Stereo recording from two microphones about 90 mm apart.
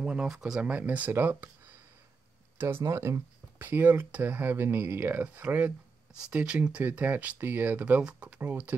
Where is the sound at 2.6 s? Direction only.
30° right (ahead or behind).